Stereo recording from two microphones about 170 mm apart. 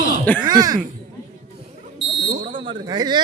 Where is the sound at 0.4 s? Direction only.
25° right (ahead or behind).